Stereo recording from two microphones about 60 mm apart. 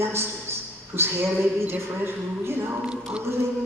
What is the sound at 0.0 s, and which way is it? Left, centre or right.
A man's voice, right.